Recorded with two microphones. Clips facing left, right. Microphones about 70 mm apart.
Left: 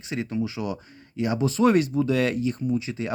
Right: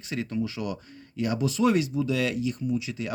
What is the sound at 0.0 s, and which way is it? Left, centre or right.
Speech, left.